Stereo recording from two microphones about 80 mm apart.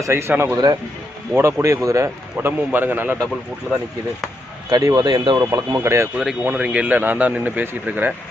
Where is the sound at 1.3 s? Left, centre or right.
Right.